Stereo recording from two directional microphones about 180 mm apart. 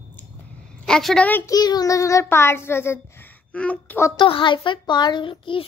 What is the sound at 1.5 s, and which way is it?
A woman's voice, 20° left (ahead or behind).